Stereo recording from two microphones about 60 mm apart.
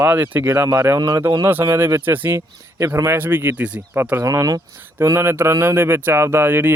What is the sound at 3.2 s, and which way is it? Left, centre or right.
Speech, right.